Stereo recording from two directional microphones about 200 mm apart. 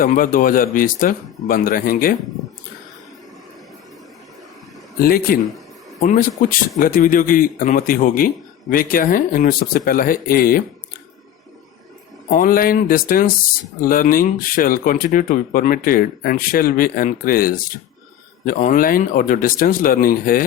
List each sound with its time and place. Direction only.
0.0 s speech: 45° left (ahead or behind)
4.9 s speech: 45° left (ahead or behind)
12.3 s speech: 45° left (ahead or behind)